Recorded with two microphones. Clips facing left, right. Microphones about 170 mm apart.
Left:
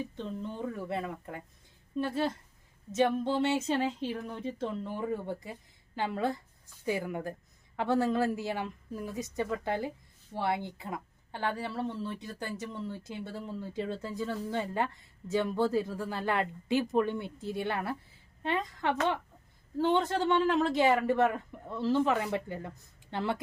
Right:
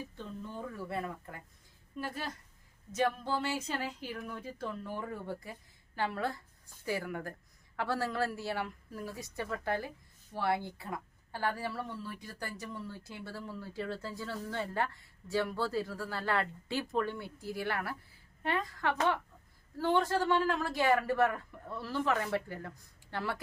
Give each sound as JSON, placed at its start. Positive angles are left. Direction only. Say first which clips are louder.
{"t": 0.9, "sound": "a woman's voice", "louder": "left 3 dB", "side_deg": 20}